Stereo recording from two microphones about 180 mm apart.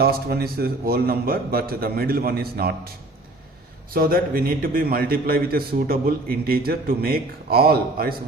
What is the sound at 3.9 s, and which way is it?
A man's voice, 55° right (ahead or behind).